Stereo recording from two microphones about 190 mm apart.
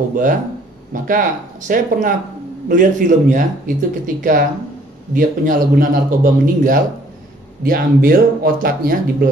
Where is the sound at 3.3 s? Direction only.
45° right (ahead or behind).